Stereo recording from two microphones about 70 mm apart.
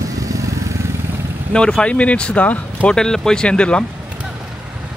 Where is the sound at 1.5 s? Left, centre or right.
Centre.